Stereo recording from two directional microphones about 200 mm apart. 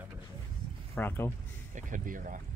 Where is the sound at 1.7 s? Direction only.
40° right (ahead or behind).